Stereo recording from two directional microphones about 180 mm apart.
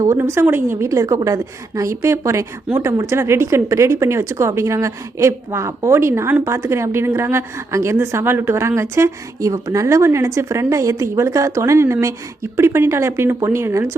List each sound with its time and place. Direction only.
0.0 s speech: 15° right (ahead or behind)